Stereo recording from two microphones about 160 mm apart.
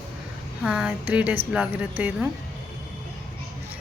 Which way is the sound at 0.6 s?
5° right (ahead or behind).